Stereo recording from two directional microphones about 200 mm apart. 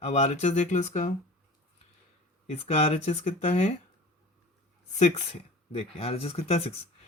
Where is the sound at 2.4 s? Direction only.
30° left (ahead or behind).